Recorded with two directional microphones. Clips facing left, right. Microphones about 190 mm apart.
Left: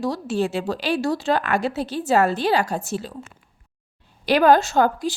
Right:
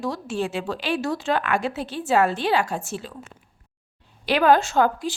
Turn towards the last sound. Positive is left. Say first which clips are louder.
# left 1 dB
turn(degrees=40)  # may be behind; listen again after turning